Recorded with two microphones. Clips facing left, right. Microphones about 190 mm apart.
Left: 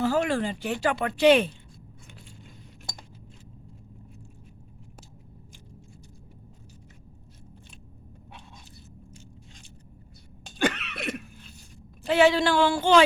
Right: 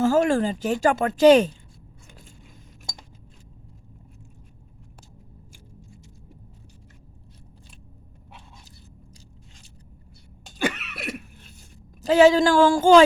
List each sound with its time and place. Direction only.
0.0 s speech: 45° right (ahead or behind)
10.4 s a sound: 5° right (ahead or behind)
12.0 s speech: 40° right (ahead or behind)